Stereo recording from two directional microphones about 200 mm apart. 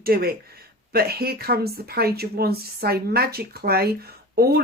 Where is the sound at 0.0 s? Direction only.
50° right (ahead or behind).